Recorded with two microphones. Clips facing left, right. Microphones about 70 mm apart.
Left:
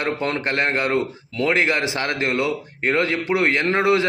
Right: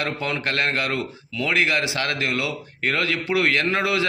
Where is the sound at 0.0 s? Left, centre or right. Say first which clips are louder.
Left 3 dB; left.